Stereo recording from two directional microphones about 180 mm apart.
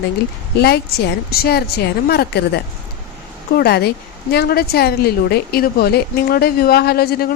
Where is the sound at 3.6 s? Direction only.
65° left (ahead or behind).